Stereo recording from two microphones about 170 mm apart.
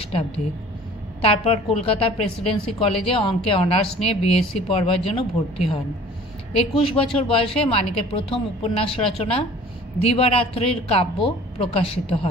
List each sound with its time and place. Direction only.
1.2 s a woman's voice: 35° left (ahead or behind)